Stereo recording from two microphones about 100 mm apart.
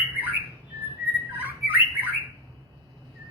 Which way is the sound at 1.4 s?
20° right (ahead or behind).